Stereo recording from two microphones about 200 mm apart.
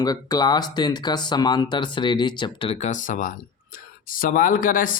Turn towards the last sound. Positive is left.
turn(degrees=45)  # may be behind; listen again after turning